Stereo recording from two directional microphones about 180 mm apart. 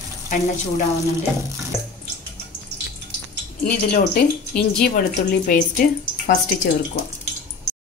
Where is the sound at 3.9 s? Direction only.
55° left (ahead or behind).